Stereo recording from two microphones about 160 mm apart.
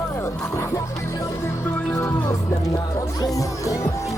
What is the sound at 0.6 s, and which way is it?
Music, 15° left (ahead or behind).